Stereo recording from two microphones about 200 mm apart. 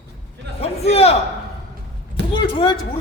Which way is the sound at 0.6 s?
30° left (ahead or behind).